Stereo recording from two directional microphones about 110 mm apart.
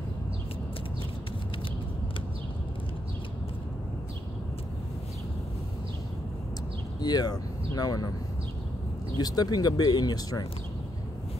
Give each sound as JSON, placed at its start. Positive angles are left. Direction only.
{"t": 7.0, "sound": "speech", "side_deg": 40}
{"t": 9.2, "sound": "speech", "side_deg": 35}